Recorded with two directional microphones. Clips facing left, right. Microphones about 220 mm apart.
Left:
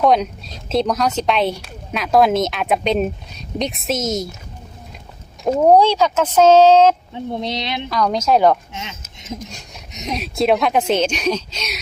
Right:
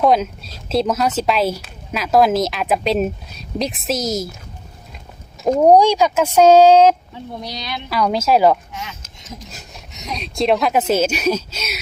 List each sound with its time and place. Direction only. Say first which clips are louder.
0.0 s speech: even; centre (ahead or behind)
5.6 s speech: right 1 dB; 15° right (ahead or behind)
7.1 s speech: left 6 dB; 25° left (ahead or behind)
7.9 s speech: right 1 dB; 5° right (ahead or behind)
8.7 s a sound: even; 25° left (ahead or behind)
9.5 s speech: left 1 dB; 5° right (ahead or behind)
9.9 s speech: left 4 dB; 20° left (ahead or behind)
10.2 s speech: even; 5° left (ahead or behind)